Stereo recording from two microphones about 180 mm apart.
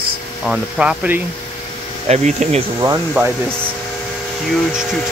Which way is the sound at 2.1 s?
40° right (ahead or behind).